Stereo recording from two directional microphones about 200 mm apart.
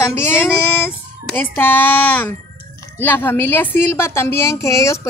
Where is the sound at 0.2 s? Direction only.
10° left (ahead or behind).